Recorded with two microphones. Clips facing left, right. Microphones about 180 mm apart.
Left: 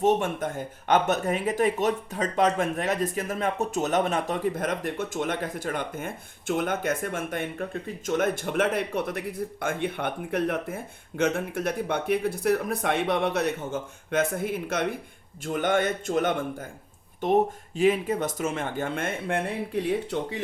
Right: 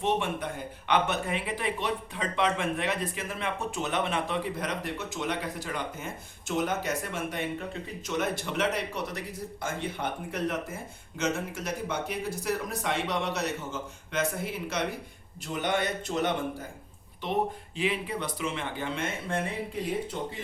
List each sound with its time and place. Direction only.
0.0 s speech: 45° left (ahead or behind)
17.7 s speech: 45° left (ahead or behind); by 20.4 s 70° left (ahead or behind)